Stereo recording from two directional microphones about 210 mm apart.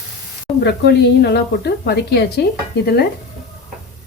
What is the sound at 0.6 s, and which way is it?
A woman's voice, 55° left (ahead or behind).